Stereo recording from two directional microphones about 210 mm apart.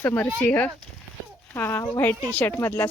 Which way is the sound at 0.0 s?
10° left (ahead or behind).